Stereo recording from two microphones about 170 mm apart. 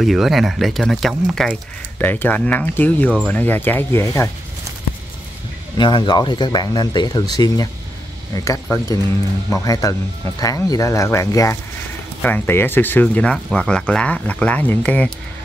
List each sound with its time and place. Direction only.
0.0 s speech: centre (ahead or behind); by 4.3 s 15° left (ahead or behind)
5.8 s speech: 25° left (ahead or behind); by 15.1 s 5° left (ahead or behind)